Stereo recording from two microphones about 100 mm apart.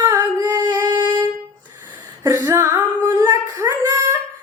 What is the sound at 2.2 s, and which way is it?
Female singing, 35° right (ahead or behind).